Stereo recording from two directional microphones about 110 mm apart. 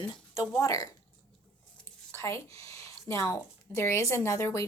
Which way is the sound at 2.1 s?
25° left (ahead or behind).